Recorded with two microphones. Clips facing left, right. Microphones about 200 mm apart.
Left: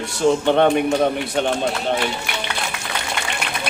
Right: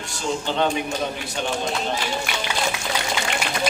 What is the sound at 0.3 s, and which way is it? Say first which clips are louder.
A man's voice: left 8 dB; 60° left (ahead or behind).